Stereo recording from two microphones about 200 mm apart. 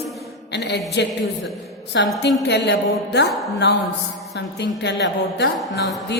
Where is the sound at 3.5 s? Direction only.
60° left (ahead or behind).